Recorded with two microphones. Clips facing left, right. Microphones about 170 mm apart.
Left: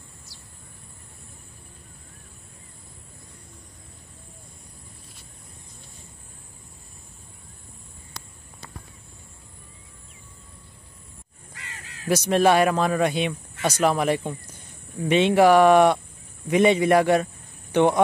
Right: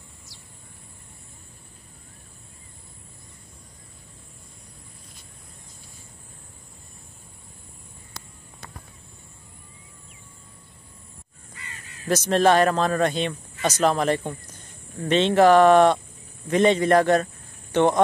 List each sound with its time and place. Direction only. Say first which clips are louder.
11.5 s crow: left 1 dB; 90° left
12.1 s speech: even; 10° left (ahead or behind)